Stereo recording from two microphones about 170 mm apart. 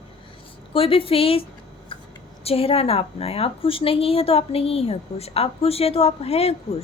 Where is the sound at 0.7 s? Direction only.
35° left (ahead or behind).